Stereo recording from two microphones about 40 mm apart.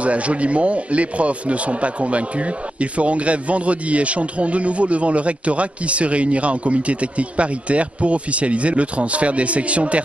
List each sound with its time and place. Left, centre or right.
0.0 s speech: right